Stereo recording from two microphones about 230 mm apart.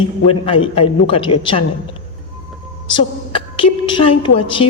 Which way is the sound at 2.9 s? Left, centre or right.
Left.